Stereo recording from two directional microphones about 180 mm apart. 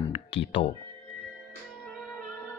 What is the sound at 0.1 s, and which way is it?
Music, 30° left (ahead or behind).